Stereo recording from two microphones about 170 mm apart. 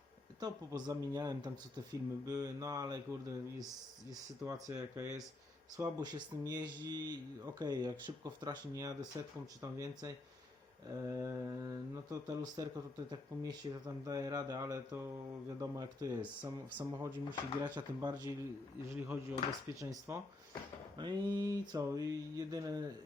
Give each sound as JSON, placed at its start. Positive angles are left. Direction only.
{"t": 0.3, "sound": "speech", "side_deg": -20}
{"t": 10.8, "sound": "mantra", "side_deg": -15}
{"t": 12.4, "sound": "speech", "side_deg": -25}
{"t": 16.7, "sound": "mantra", "side_deg": -15}
{"t": 17.6, "sound": "speech", "side_deg": -25}
{"t": 18.9, "sound": "mantra", "side_deg": -15}
{"t": 21.0, "sound": "speech", "side_deg": -25}